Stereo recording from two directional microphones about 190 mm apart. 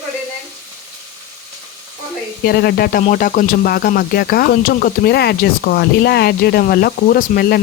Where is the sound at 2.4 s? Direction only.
55° left (ahead or behind).